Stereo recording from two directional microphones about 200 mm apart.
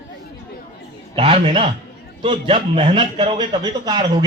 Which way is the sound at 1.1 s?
25° right (ahead or behind).